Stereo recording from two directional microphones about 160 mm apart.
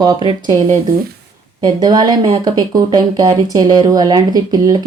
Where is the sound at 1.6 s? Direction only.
25° right (ahead or behind).